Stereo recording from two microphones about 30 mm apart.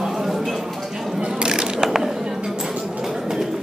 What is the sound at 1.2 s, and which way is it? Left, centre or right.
Mechanisms, right.